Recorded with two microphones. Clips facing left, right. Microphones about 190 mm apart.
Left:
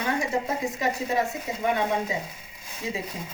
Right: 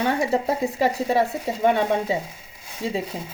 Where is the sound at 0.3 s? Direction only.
30° right (ahead or behind).